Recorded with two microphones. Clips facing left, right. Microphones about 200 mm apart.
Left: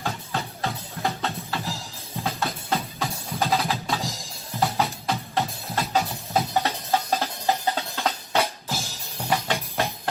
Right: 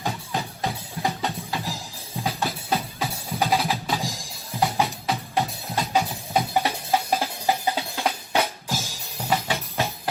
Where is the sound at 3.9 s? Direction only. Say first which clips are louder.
Right 1 dB; 15° right (ahead or behind).